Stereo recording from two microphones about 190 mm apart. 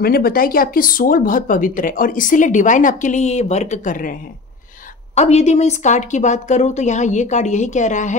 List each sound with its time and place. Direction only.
0.0 s speech: 50° left (ahead or behind)
5.1 s speech: 35° left (ahead or behind)